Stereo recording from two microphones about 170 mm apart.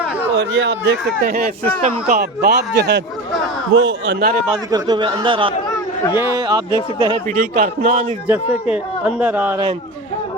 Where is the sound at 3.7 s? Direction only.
90° right.